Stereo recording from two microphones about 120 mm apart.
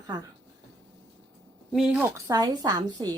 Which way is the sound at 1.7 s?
5° right (ahead or behind).